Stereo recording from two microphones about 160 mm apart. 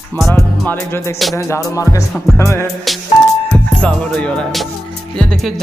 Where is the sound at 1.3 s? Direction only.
20° left (ahead or behind).